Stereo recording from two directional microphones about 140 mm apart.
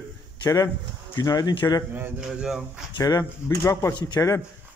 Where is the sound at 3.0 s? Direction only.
25° left (ahead or behind).